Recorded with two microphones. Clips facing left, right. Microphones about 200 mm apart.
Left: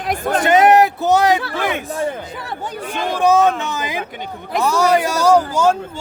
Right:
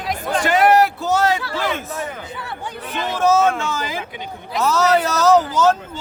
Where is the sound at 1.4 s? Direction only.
55° left (ahead or behind).